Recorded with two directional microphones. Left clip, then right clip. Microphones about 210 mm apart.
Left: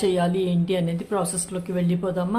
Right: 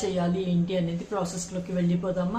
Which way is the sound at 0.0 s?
45° left (ahead or behind).